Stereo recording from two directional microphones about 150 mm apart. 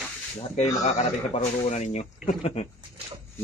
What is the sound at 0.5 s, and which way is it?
Speech, 50° left (ahead or behind).